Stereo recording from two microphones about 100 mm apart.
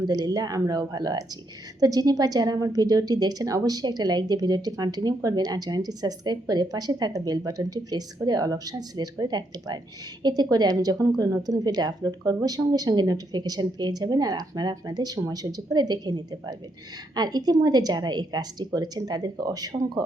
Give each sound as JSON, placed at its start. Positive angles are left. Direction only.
{"t": 0.1, "sound": "a woman's voice", "side_deg": -40}